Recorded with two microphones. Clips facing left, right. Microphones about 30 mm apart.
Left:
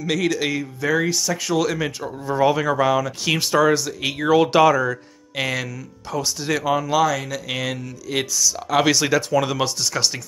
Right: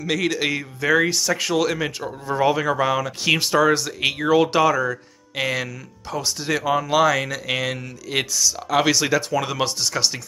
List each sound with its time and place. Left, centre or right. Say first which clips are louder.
0.0 s speech: left 1 dB; centre
0.8 s speech: right 2 dB; right
1.5 s speech: left 2 dB; right
2.2 s speech: left 1 dB; centre
3.7 s speech: right 1 dB; right
4.2 s speech: left 3 dB; centre
7.0 s speech: right 2 dB; right
8.6 s speech: left 1 dB; centre